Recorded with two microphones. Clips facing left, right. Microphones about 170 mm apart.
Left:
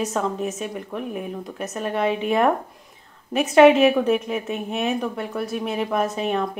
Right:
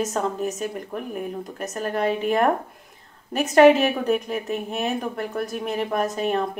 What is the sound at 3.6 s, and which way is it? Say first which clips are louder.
Speech: left 1 dB; centre (ahead or behind).